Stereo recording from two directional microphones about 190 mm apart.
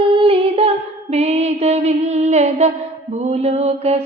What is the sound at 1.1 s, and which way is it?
Mantra, 35° right (ahead or behind).